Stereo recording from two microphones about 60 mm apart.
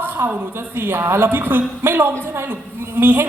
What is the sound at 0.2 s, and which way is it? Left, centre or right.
A woman's voice, right.